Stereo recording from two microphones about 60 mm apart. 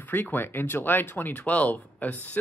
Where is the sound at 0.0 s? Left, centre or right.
Left.